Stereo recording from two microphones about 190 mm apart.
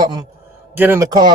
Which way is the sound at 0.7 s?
10° right (ahead or behind).